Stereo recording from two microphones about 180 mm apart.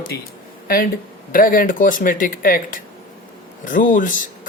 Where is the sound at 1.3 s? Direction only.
50° left (ahead or behind).